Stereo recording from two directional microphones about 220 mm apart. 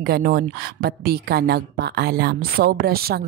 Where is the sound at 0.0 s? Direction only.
45° right (ahead or behind).